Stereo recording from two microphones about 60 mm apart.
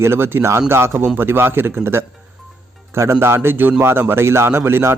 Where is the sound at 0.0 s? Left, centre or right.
Right.